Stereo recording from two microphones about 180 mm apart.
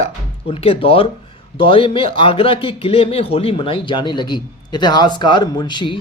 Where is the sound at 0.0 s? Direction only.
30° left (ahead or behind).